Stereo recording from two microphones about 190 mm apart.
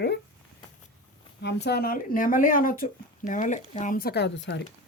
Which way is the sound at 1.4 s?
65° left (ahead or behind).